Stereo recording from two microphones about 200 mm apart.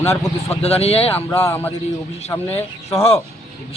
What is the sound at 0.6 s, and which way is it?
Speech, 30° left (ahead or behind).